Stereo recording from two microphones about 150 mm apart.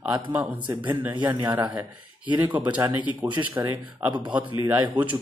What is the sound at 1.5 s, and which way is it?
Speech, 10° right (ahead or behind).